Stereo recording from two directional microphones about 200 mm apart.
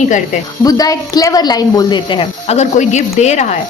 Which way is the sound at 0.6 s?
20° left (ahead or behind).